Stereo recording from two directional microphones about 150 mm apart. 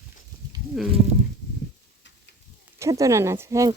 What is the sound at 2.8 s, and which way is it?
Speech, 20° right (ahead or behind).